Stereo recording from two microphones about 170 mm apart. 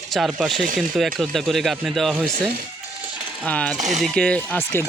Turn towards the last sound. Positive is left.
turn(degrees=15)  # may be behind; listen again after turning